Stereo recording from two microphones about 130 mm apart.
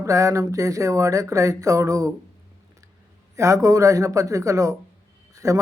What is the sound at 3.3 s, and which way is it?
A man's voice, 25° right (ahead or behind).